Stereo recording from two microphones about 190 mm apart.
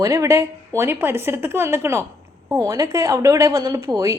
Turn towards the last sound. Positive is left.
turn(degrees=-15)  # may be behind; listen again after turning